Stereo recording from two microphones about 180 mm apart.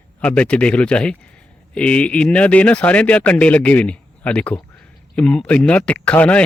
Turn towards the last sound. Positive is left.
turn(degrees=10)  # may be behind; listen again after turning